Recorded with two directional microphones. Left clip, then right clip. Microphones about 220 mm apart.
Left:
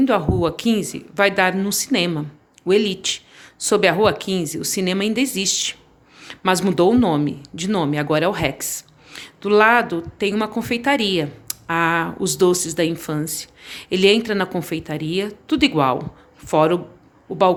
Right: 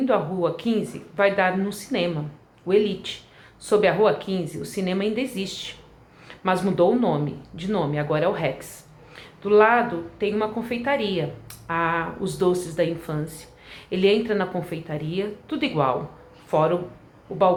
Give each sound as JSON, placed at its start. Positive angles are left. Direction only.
{"t": 0.0, "sound": "speech", "side_deg": 50}